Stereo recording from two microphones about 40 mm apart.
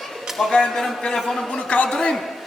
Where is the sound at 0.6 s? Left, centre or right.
Centre.